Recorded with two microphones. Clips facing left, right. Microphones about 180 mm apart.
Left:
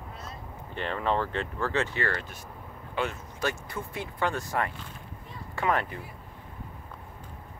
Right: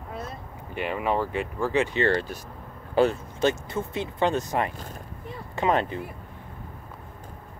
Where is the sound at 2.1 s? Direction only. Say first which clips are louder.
Right 8 dB; 35° right (ahead or behind).